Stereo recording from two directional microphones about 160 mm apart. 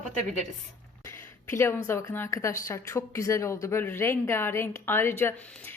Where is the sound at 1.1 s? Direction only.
15° left (ahead or behind).